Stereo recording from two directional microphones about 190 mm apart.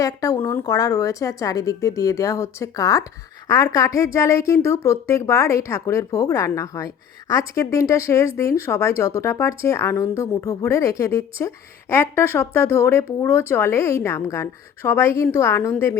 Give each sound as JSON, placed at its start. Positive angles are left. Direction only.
{"t": 0.0, "sound": "a woman's voice", "side_deg": 15}